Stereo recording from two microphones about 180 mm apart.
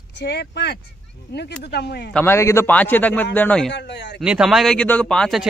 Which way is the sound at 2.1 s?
15° left (ahead or behind).